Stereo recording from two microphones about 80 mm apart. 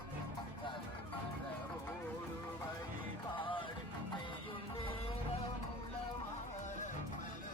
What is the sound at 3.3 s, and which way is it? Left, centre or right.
Music, left.